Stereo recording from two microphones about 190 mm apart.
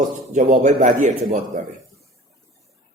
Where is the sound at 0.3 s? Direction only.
40° right (ahead or behind).